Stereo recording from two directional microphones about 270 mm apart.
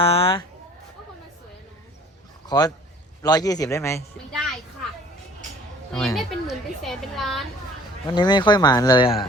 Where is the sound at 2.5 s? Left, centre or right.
Centre.